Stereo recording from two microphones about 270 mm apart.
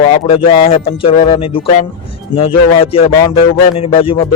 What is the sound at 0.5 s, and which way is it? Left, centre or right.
Speech, centre.